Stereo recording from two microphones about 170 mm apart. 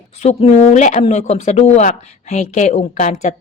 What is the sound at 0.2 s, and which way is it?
Speech, 40° left (ahead or behind).